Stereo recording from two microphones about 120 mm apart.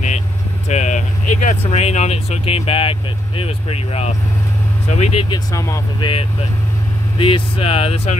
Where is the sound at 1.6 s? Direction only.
65° left (ahead or behind).